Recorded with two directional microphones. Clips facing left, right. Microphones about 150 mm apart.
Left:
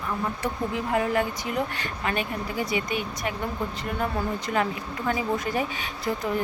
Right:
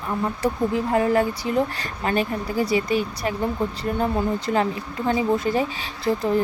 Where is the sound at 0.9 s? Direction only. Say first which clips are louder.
Right 3 dB; 35° right (ahead or behind).